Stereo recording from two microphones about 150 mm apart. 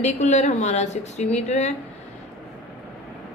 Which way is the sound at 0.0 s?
50° left (ahead or behind).